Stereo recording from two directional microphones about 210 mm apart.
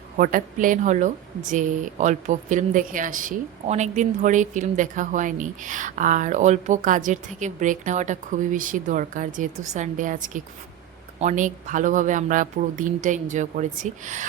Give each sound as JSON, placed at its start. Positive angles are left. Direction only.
{"t": 0.2, "sound": "speech", "side_deg": -40}